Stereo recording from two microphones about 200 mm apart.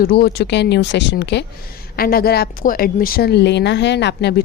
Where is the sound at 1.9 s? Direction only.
50° left (ahead or behind).